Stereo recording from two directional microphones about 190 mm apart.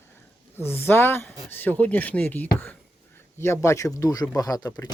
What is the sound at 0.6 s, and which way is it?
Speech, 10° left (ahead or behind).